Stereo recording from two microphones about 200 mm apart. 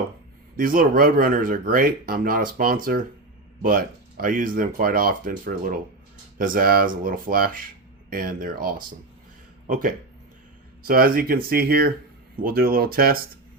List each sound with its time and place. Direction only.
0.5 s speech: 45° right (ahead or behind)